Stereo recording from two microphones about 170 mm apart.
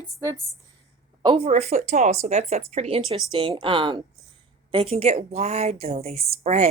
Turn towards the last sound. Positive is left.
turn(degrees=-40)  # may be behind; listen again after turning